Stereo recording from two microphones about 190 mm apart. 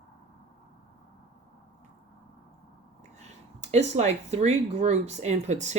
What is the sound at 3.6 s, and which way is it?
Speech, 35° right (ahead or behind).